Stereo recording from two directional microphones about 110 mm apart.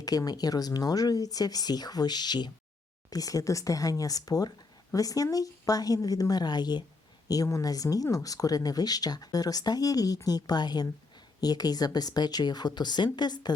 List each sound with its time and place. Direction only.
0.0 s speech: 35° left (ahead or behind)